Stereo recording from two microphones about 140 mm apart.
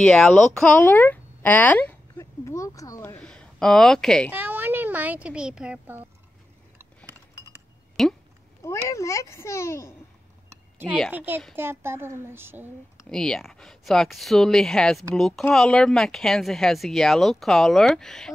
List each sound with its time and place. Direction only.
0.0 s speech: 5° left (ahead or behind)
2.1 s a sound: 20° left (ahead or behind)
3.2 s a sound: 5° left (ahead or behind)
4.3 s speech: 15° right (ahead or behind)
8.0 s speech: centre (ahead or behind)
8.6 s a child's voice: 20° left (ahead or behind)
10.5 s a sound: 15° right (ahead or behind)
11.1 s a child's voice: 15° right (ahead or behind)
13.1 s speech: 5° left (ahead or behind)